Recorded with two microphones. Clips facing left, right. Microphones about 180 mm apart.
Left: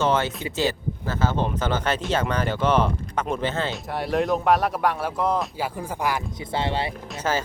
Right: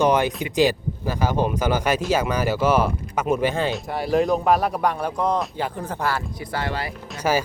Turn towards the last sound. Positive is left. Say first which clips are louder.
# right 4 dB
turn(degrees=-10)  # may be behind; listen again after turning